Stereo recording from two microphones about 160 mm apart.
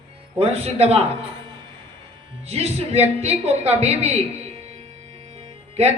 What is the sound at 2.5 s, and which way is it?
A man's voice, 40° right (ahead or behind).